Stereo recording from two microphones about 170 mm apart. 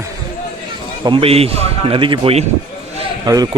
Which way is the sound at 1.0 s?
30° right (ahead or behind).